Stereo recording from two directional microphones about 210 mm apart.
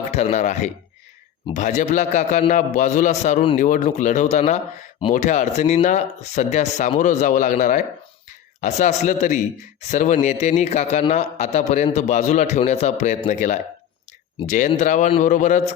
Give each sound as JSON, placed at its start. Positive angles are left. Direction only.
{"t": 0.1, "sound": "speech", "side_deg": 30}